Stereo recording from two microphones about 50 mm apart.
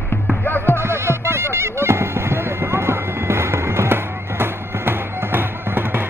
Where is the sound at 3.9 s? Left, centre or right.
Right.